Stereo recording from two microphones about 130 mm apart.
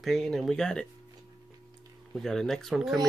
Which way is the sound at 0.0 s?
Centre (ahead or behind).